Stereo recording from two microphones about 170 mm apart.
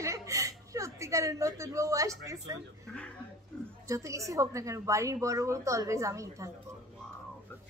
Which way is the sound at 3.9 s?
20° right (ahead or behind).